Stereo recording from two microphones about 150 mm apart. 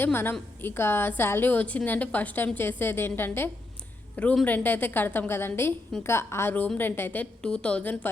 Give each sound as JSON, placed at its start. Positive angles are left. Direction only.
{"t": 0.0, "sound": "a woman's voice", "side_deg": 15}